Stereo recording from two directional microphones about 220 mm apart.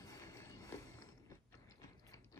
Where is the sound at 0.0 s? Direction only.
15° left (ahead or behind).